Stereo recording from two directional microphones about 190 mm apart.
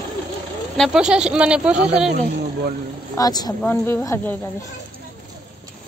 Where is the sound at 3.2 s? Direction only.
20° left (ahead or behind).